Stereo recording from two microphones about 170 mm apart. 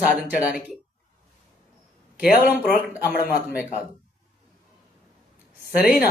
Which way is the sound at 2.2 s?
60° left (ahead or behind).